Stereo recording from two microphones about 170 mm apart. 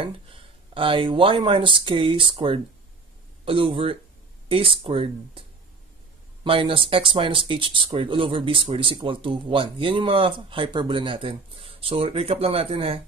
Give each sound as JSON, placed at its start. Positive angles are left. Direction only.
{"t": 0.0, "sound": "speech", "side_deg": -30}
{"t": 6.4, "sound": "speech", "side_deg": -30}